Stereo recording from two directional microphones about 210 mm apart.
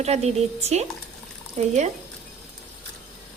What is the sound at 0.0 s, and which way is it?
A woman's voice, 30° right (ahead or behind).